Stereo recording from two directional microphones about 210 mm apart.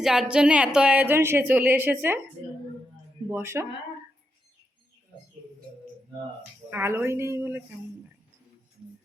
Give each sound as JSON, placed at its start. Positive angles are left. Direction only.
{"t": 0.0, "sound": "a woman's voice", "side_deg": -5}
{"t": 3.2, "sound": "a woman's voice", "side_deg": -10}
{"t": 6.7, "sound": "a woman's voice", "side_deg": -10}